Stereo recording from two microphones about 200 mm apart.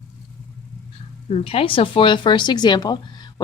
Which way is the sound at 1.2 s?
30° left (ahead or behind).